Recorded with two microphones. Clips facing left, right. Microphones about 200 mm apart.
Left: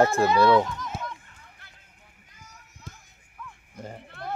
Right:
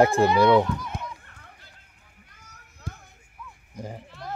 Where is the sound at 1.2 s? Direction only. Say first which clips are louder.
Right 2 dB; 60° right (ahead or behind).